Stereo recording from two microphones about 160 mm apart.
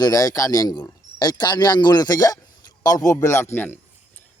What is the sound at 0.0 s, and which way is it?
A man's voice, 20° left (ahead or behind).